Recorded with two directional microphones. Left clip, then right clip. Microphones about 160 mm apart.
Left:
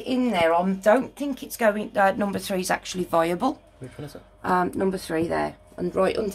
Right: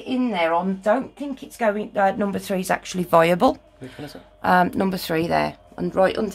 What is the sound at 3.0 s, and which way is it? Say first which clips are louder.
Speech: right 8 dB; 60° right (ahead or behind).